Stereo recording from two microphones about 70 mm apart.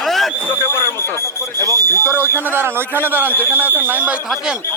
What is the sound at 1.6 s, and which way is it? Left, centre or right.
Speech, right.